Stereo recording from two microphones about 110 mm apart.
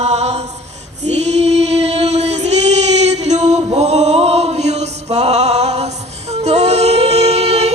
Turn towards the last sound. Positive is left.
turn(degrees=-90)